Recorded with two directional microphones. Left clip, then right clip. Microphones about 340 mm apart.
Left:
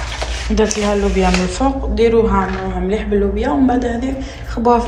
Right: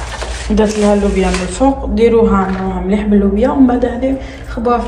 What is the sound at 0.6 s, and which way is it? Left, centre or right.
A woman's voice, centre.